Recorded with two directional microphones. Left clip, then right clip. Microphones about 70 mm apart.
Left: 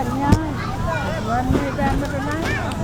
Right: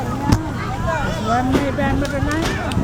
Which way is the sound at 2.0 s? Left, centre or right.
Right.